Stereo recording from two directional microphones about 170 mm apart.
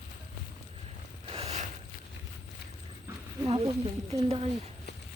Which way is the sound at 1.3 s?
35° right (ahead or behind).